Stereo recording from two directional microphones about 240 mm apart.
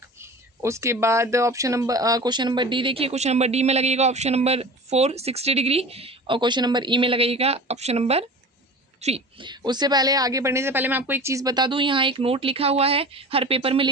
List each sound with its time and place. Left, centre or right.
0.2 s speech: centre